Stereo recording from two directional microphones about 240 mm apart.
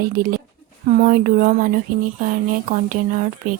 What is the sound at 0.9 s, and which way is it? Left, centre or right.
Speech, right.